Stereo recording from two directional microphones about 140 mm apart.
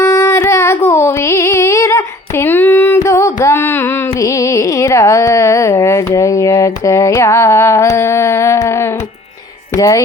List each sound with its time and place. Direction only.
0.0 s music: 20° left (ahead or behind)
3.4 s carnatic music: 15° left (ahead or behind)
9.7 s music: 20° left (ahead or behind)